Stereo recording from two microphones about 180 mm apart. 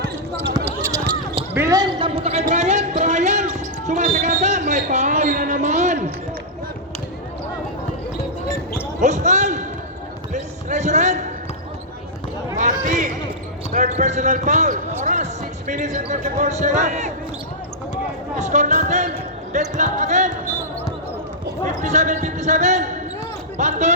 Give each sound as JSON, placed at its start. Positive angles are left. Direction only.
{"t": 0.5, "sound": "basketball bounce", "side_deg": -15}
{"t": 1.5, "sound": "a sound", "side_deg": -20}
{"t": 3.0, "sound": "basketball bounce", "side_deg": -40}
{"t": 3.8, "sound": "a sound", "side_deg": -40}
{"t": 9.0, "sound": "basketball bounce", "side_deg": -40}
{"t": 12.5, "sound": "basketball bounce", "side_deg": -40}
{"t": 13.7, "sound": "speech", "side_deg": -40}
{"t": 18.3, "sound": "music", "side_deg": -40}
{"t": 19.5, "sound": "basketball bounce", "side_deg": -40}
{"t": 21.8, "sound": "speech", "side_deg": -40}